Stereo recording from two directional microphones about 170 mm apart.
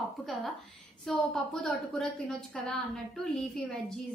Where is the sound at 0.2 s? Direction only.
Centre (ahead or behind).